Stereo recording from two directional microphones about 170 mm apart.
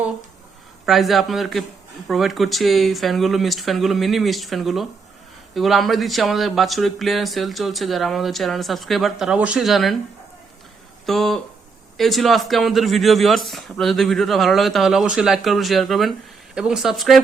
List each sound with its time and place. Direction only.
0.9 s speech: centre (ahead or behind)
11.0 s speech: centre (ahead or behind)